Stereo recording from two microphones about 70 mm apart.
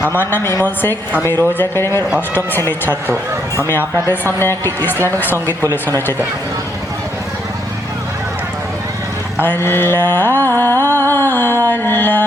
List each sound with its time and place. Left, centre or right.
0.1 s music: left
0.6 s a woman's voice: left
1.5 s music: left
4.1 s music: left
9.4 s music: left
11.7 s mantra: left